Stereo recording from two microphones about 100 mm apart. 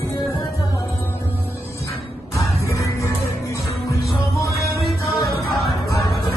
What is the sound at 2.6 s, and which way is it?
Music, 30° left (ahead or behind).